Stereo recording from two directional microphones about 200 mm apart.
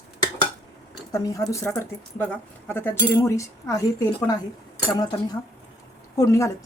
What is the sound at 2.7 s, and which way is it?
Speech, 10° left (ahead or behind).